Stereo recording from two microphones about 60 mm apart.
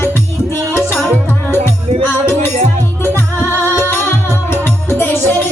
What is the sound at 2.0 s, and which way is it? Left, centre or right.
Music, left.